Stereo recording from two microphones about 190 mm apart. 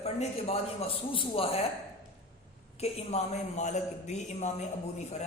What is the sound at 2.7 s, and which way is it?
A man's voice, 35° left (ahead or behind).